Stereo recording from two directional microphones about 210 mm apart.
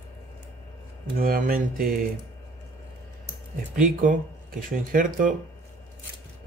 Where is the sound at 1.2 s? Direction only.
45° right (ahead or behind).